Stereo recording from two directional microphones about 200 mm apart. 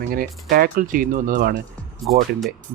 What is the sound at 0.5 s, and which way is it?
Speech, 45° right (ahead or behind).